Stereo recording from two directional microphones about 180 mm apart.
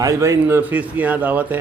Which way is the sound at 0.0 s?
15° right (ahead or behind).